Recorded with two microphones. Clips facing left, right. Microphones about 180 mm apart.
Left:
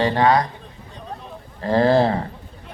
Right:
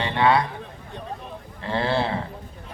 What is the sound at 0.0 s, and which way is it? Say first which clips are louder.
Speech: left 3 dB; 40° left (ahead or behind).